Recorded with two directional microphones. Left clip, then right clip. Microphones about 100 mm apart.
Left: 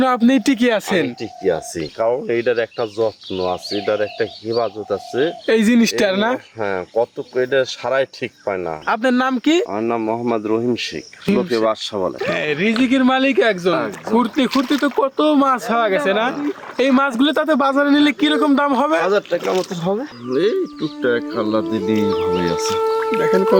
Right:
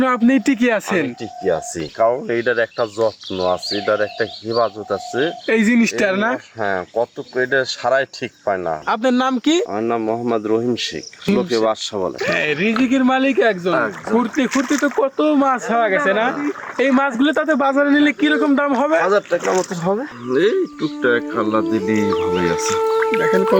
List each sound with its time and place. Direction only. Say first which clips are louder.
0.0 s speech: left 1 dB; 25° left (ahead or behind)
6.6 s speech: even; 40° left (ahead or behind); by 8.8 s 20° left (ahead or behind)
8.9 s speech: left 1 dB; 5° left (ahead or behind)
11.6 s speech: even; 20° left (ahead or behind)
12.2 s speech: right 2 dB; 5° left (ahead or behind); by 19.0 s 35° left (ahead or behind)
19.0 s speech: right 1 dB; 15° left (ahead or behind)
19.4 s speech: right 1 dB; 5° left (ahead or behind)
20.3 s speech: right 1 dB; 5° right (ahead or behind)